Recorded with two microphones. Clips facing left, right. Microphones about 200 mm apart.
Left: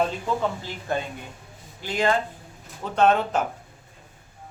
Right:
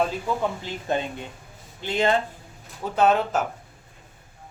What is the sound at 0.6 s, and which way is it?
Speech, 20° right (ahead or behind).